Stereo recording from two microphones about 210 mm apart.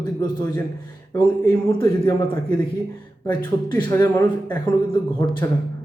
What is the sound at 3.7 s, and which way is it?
Speech, 15° left (ahead or behind).